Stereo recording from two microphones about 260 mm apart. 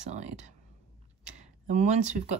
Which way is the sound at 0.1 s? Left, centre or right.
Right.